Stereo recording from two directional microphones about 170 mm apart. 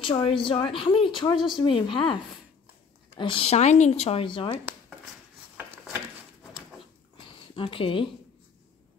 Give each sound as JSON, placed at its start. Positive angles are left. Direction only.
{"t": 0.0, "sound": "a woman's voice", "side_deg": 30}
{"t": 3.2, "sound": "speech", "side_deg": 30}
{"t": 7.2, "sound": "a sound", "side_deg": 30}